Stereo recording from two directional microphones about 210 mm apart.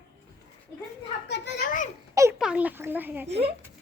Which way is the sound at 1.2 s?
50° left (ahead or behind).